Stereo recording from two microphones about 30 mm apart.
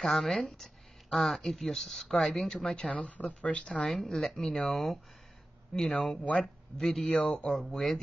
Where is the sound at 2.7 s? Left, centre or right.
Left.